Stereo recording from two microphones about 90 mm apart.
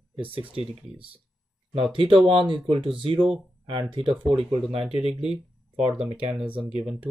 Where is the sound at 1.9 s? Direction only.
75° right (ahead or behind).